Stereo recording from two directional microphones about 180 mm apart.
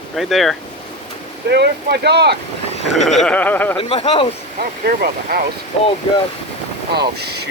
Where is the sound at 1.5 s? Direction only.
65° right (ahead or behind).